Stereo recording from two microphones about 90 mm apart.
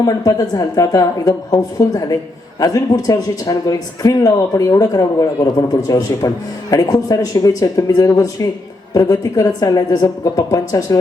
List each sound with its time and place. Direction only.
0.0 s a man's voice: 40° left (ahead or behind)